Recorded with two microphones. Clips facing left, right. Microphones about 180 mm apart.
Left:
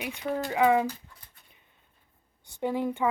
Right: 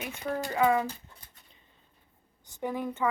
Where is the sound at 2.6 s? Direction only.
25° left (ahead or behind).